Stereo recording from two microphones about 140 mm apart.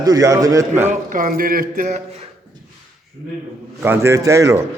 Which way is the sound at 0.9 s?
75° right (ahead or behind).